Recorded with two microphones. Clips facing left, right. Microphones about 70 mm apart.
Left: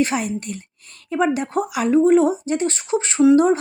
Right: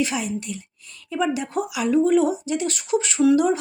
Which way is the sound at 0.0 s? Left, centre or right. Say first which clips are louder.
Left 4 dB; left.